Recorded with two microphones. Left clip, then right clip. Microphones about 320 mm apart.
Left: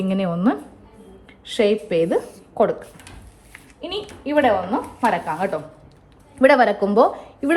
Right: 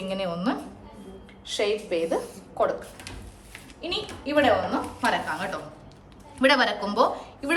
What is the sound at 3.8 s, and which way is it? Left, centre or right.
A woman's voice, centre.